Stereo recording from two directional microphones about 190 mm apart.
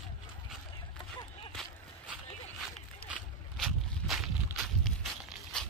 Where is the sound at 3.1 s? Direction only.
Centre (ahead or behind).